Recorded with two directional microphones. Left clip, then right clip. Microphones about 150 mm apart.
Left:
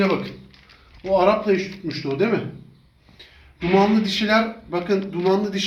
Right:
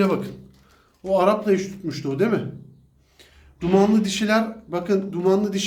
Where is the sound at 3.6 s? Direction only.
10° right (ahead or behind).